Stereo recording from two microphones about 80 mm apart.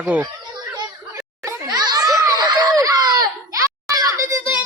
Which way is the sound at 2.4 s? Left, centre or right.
Right.